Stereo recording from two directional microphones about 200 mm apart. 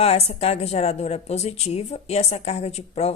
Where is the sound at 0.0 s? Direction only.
30° left (ahead or behind).